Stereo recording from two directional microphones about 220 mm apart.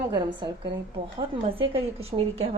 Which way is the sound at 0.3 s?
20° right (ahead or behind).